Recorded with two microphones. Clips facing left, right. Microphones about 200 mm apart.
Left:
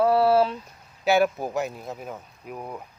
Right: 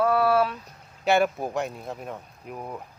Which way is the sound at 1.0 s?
Centre (ahead or behind).